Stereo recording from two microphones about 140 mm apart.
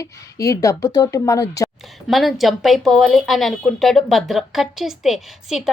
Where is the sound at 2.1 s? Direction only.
Centre (ahead or behind).